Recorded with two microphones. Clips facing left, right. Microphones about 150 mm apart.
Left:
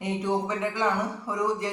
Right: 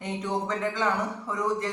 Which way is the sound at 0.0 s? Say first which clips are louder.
Left 3 dB; 10° left (ahead or behind).